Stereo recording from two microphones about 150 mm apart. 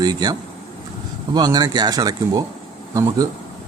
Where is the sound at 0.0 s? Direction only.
25° right (ahead or behind).